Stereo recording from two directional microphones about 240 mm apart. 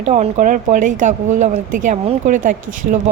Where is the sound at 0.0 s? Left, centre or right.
Right.